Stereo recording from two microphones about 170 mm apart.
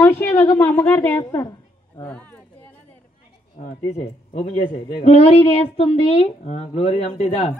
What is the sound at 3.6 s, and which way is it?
Speech, 40° left (ahead or behind).